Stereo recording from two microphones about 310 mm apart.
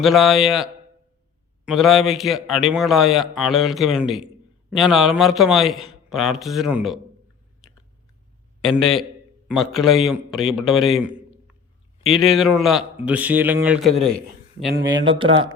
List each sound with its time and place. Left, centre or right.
0.0 s a man's voice: centre
8.6 s a man's voice: centre
13.9 s a man's voice: right
14.7 s speech: right
15.0 s speech: centre